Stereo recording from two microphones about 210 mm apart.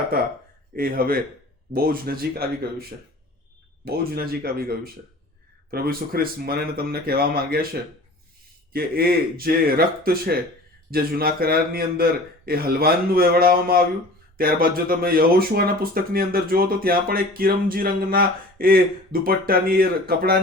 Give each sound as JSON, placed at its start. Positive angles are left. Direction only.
{"t": 0.8, "sound": "speech", "side_deg": -45}
{"t": 3.8, "sound": "speech", "side_deg": -45}